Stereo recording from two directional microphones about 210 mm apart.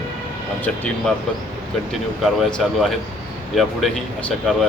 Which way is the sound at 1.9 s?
Centre (ahead or behind).